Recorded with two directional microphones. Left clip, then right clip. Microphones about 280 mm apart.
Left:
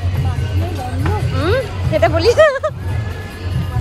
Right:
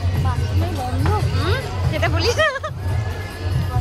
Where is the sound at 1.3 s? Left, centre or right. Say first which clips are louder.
Left 6 dB; centre.